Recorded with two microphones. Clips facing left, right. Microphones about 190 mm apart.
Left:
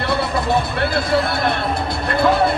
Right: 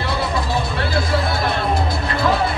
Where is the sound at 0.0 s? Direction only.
60° left (ahead or behind).